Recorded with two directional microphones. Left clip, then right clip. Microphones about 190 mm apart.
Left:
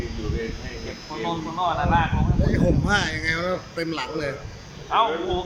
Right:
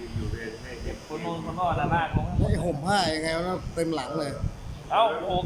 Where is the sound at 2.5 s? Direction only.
20° right (ahead or behind).